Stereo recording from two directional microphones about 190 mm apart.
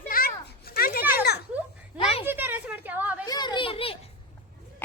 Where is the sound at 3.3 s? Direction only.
25° left (ahead or behind).